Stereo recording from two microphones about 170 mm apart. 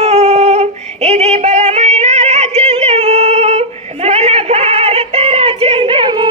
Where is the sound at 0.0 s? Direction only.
40° right (ahead or behind).